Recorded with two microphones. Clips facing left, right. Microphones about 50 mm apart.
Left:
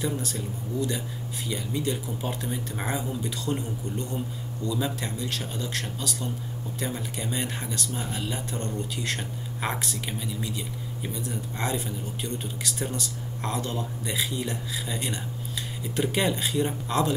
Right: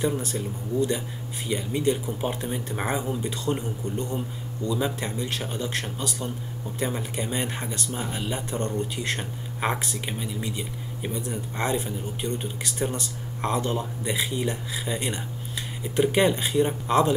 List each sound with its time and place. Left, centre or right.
0.0 s speech: right
4.6 s speech: centre